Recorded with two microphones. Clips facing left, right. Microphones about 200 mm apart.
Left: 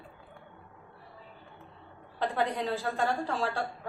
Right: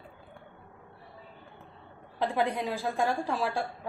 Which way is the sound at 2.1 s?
10° right (ahead or behind).